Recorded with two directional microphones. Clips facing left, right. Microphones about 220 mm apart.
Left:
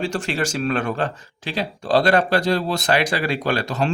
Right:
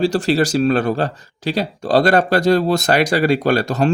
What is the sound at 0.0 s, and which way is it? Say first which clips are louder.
Speech: right 8 dB; 35° right (ahead or behind).